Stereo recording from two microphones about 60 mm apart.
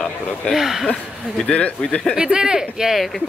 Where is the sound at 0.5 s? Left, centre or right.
Centre.